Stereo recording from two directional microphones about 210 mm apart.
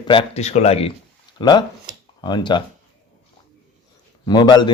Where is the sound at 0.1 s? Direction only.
30° left (ahead or behind).